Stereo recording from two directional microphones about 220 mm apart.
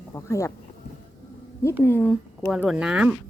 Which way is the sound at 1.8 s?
10° left (ahead or behind).